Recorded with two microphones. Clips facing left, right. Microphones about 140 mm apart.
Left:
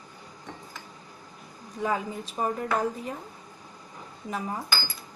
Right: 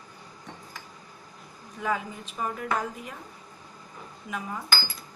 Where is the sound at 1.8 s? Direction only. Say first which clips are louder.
Left 2 dB; 35° left (ahead or behind).